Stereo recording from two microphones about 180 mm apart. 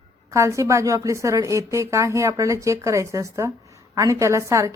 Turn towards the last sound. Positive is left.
turn(degrees=-15)  # may be behind; listen again after turning